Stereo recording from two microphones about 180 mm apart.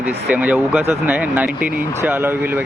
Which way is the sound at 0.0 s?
10° right (ahead or behind).